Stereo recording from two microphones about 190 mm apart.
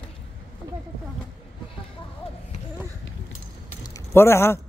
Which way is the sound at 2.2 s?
30° left (ahead or behind).